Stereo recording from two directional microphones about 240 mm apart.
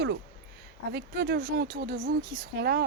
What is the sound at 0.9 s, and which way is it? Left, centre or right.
Speech, right.